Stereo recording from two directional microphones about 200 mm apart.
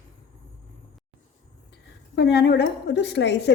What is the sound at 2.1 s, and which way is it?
A woman's voice, 60° left (ahead or behind).